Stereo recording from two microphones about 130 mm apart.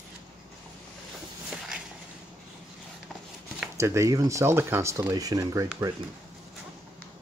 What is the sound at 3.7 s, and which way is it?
Speech, 20° right (ahead or behind).